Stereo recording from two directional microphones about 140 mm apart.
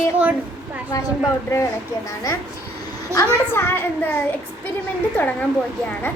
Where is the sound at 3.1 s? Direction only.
20° right (ahead or behind).